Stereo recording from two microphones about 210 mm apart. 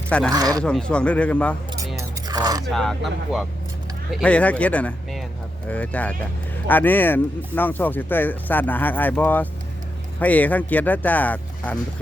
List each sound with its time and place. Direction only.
0.1 s speech: 5° left (ahead or behind)
0.3 s speech: 15° right (ahead or behind)
0.6 s speech: 5° left (ahead or behind)
2.0 s a sound: 20° right (ahead or behind)
2.6 s speech: centre (ahead or behind)